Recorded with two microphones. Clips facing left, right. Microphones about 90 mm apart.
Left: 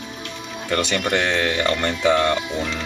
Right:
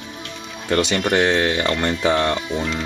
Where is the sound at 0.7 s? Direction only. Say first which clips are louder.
Right 3 dB; 20° right (ahead or behind).